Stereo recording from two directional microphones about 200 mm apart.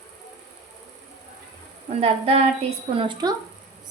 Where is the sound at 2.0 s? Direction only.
30° right (ahead or behind).